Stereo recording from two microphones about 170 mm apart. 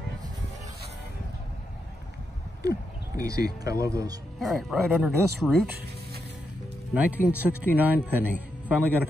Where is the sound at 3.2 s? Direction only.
20° right (ahead or behind).